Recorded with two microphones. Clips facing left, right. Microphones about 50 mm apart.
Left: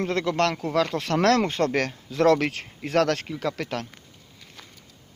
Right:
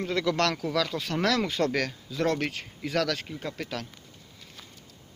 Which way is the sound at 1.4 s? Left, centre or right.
Left.